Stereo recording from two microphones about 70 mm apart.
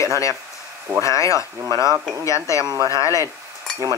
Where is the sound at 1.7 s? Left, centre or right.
Right.